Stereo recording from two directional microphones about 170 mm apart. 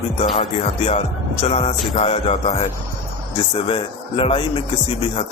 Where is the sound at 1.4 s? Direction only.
35° left (ahead or behind).